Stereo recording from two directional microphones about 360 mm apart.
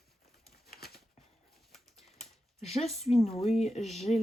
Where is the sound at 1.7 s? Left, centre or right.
Centre.